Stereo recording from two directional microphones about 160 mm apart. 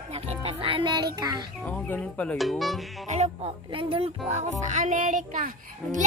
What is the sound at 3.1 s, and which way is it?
A child's voice, 45° right (ahead or behind).